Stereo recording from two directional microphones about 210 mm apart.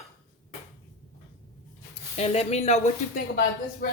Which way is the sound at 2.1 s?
30° left (ahead or behind).